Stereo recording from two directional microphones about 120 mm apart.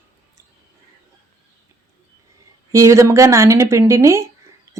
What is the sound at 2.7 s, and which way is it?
A woman's voice, 25° right (ahead or behind).